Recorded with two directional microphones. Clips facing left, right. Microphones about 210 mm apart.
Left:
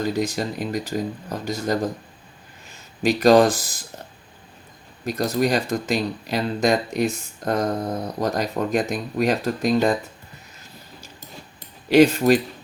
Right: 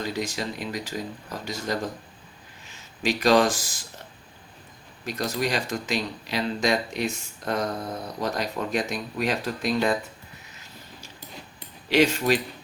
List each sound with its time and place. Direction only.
0.0 s speech: 45° left (ahead or behind)
3.0 s speech: 45° left (ahead or behind)
5.0 s speech: 40° left (ahead or behind)
11.9 s speech: 50° left (ahead or behind)